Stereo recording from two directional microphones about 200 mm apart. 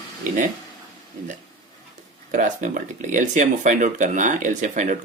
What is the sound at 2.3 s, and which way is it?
Speech, 40° right (ahead or behind).